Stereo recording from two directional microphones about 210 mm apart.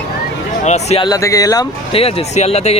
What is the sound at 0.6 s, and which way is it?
Speech, 30° left (ahead or behind).